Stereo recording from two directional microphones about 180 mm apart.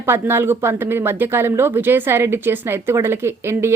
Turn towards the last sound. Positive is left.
turn(degrees=-15)  # may be behind; listen again after turning